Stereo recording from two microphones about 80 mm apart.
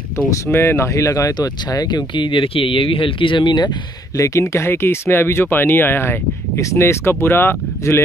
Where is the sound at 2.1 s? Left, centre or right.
Left.